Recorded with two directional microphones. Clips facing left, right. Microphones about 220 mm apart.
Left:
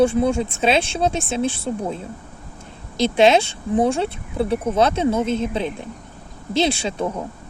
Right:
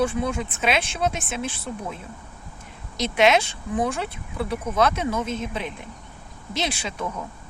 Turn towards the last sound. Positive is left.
turn(degrees=30)  # may be behind; listen again after turning